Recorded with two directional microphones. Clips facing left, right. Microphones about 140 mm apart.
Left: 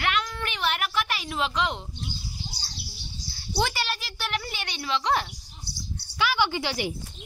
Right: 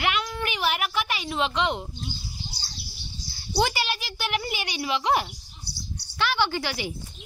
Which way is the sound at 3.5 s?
5° right (ahead or behind).